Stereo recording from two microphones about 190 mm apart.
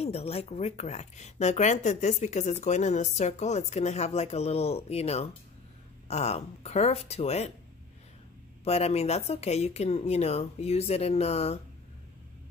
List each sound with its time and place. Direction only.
0.0 s speech: 30° left (ahead or behind)
8.6 s speech: 35° left (ahead or behind)